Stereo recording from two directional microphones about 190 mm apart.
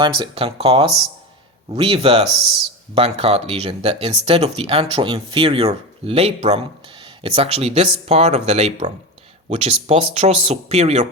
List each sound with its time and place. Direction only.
0.0 s speech: 25° right (ahead or behind)